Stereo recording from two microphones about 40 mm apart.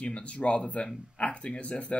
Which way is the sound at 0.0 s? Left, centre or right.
Left.